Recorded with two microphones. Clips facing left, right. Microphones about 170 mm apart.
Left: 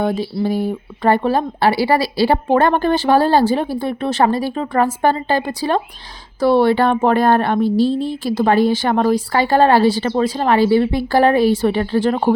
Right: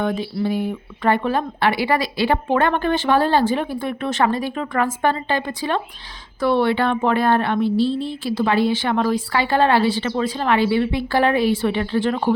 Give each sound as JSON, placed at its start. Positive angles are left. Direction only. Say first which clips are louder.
{"t": 0.0, "sound": "speech", "louder": "left 3 dB", "side_deg": 35}